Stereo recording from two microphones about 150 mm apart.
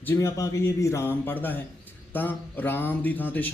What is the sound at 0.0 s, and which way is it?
A man's voice, 20° left (ahead or behind).